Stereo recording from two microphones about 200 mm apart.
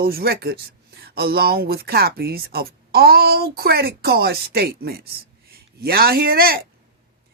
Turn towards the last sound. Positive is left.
turn(degrees=-50)  # may be behind; listen again after turning